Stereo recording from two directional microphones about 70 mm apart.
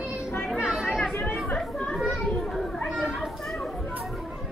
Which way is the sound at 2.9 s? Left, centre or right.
Centre.